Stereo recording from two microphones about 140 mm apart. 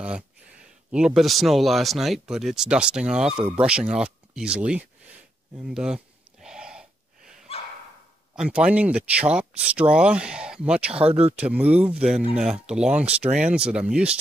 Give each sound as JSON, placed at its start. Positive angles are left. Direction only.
{"t": 0.9, "sound": "speech", "side_deg": -5}
{"t": 5.7, "sound": "a sound", "side_deg": -5}
{"t": 8.4, "sound": "speech", "side_deg": -10}
{"t": 11.1, "sound": "speech", "side_deg": -45}
{"t": 11.3, "sound": "speech", "side_deg": -10}